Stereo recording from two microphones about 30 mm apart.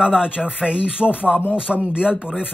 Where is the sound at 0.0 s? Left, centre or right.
Right.